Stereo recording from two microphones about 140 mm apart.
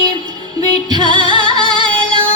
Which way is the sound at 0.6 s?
35° right (ahead or behind).